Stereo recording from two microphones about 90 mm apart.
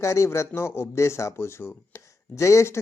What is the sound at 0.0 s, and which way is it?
Speech, 35° left (ahead or behind).